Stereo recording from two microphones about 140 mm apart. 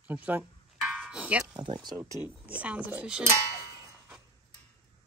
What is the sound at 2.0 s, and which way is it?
Speech, 15° right (ahead or behind).